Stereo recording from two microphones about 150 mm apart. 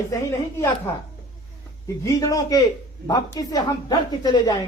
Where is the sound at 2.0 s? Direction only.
20° left (ahead or behind).